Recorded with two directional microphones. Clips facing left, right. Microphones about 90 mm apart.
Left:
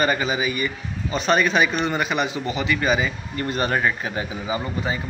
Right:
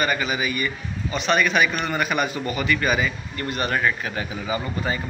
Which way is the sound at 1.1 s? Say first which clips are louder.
Left 1 dB; 35° left (ahead or behind).